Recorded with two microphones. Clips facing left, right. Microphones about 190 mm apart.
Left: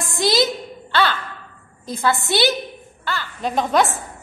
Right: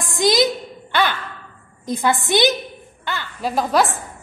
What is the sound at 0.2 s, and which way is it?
Speech, 20° right (ahead or behind).